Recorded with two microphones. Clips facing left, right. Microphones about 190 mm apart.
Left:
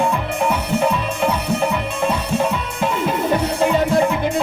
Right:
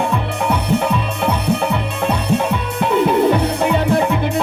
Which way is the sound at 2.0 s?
65° right (ahead or behind).